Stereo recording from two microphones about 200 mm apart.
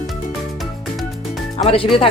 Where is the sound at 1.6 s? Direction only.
25° left (ahead or behind).